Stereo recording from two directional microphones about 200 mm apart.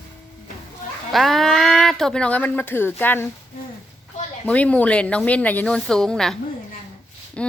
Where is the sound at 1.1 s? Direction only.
Centre (ahead or behind).